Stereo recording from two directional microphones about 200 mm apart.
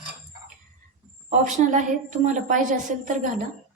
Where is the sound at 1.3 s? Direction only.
40° right (ahead or behind).